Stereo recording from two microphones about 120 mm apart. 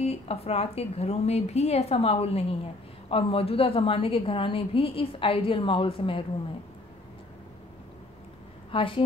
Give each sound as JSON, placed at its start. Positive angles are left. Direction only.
{"t": 0.0, "sound": "a woman's voice", "side_deg": 60}
{"t": 8.7, "sound": "a woman's voice", "side_deg": 50}